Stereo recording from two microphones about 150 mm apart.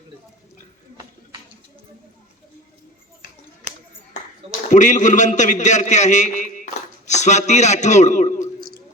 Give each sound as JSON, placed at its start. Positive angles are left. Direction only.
{"t": 4.7, "sound": "a man's voice", "side_deg": 55}